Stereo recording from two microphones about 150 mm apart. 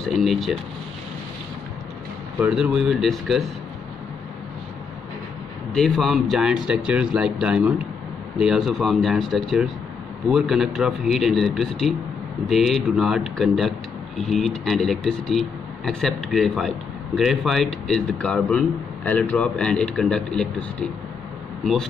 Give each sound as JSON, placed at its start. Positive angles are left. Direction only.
{"t": 0.0, "sound": "speech", "side_deg": 0}
{"t": 2.4, "sound": "speech", "side_deg": -5}
{"t": 5.8, "sound": "speech", "side_deg": 0}